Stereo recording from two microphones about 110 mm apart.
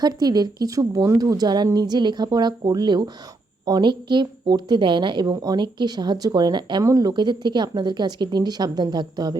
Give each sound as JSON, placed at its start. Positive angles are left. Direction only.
{"t": 0.0, "sound": "a woman's voice", "side_deg": -35}
{"t": 6.8, "sound": "a woman's voice", "side_deg": -35}
{"t": 7.1, "sound": "a woman's voice", "side_deg": -45}